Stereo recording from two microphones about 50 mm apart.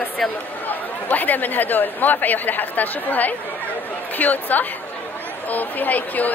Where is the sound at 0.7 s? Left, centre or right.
Left.